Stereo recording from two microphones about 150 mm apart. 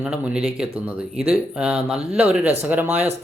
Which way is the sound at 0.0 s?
5° right (ahead or behind).